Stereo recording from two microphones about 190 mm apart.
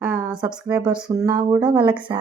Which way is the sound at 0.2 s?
5° right (ahead or behind).